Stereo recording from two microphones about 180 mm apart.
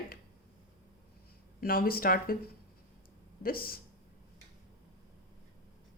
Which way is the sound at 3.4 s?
55° left (ahead or behind).